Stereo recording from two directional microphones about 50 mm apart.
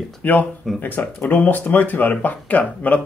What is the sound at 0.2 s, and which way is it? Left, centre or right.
Speech, left.